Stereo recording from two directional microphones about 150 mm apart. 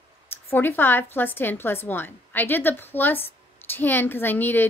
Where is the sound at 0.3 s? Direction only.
15° left (ahead or behind).